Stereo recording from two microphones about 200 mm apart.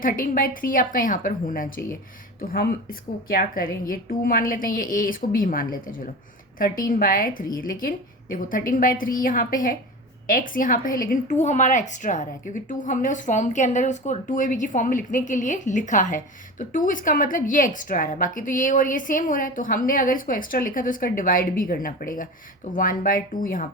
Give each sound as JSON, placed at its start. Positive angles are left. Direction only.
{"t": 0.0, "sound": "a woman's voice", "side_deg": 45}